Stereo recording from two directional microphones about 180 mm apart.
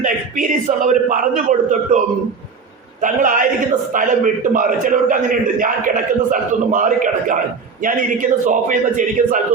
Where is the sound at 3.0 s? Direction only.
45° right (ahead or behind).